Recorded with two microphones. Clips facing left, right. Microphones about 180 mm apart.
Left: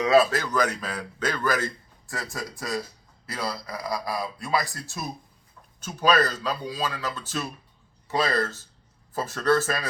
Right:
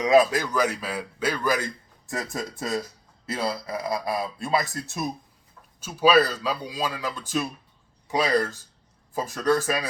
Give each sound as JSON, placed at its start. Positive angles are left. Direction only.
{"t": 0.0, "sound": "a man's voice", "side_deg": -15}
{"t": 5.8, "sound": "speech", "side_deg": -10}